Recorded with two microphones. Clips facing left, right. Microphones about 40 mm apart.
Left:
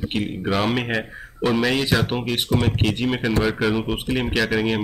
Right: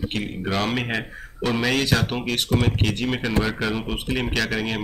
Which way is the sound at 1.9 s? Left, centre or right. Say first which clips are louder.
Left 1 dB; centre.